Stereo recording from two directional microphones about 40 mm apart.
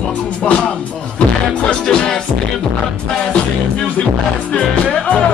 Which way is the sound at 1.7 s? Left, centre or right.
Centre.